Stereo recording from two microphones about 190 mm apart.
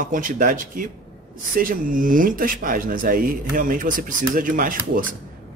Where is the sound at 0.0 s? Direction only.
45° right (ahead or behind).